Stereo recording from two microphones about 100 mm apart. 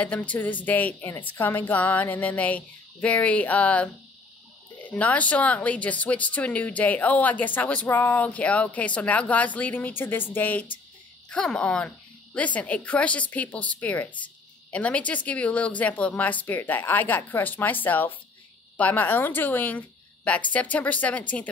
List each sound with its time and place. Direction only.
0.0 s speech: 15° left (ahead or behind)